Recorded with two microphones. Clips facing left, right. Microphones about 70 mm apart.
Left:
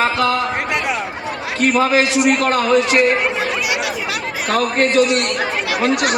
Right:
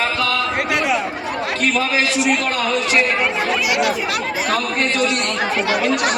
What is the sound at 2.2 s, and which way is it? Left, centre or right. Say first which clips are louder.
Speech: left 4 dB; left.